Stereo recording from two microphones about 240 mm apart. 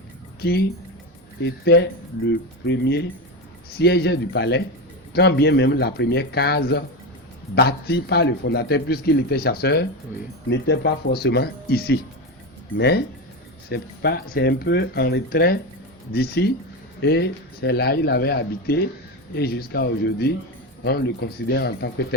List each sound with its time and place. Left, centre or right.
1.4 s a man's voice: left